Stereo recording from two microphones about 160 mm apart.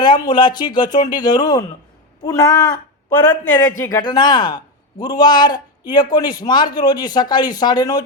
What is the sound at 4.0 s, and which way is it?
A man's voice, 25° left (ahead or behind).